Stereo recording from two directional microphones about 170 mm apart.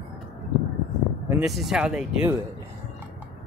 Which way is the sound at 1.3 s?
5° right (ahead or behind).